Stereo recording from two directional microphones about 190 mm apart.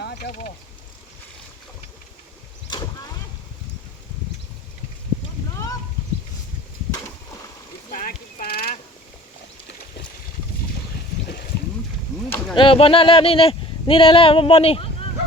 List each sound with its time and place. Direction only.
0.2 s speech: 45° left (ahead or behind)
2.6 s vehicle: 20° left (ahead or behind)
7.9 s clip-clop: 45° left (ahead or behind)
12.5 s speech: 30° left (ahead or behind)